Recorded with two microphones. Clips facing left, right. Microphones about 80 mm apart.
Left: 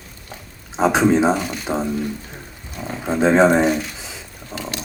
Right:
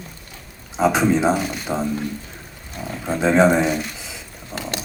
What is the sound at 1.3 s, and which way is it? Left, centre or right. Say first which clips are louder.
Speech: even; centre.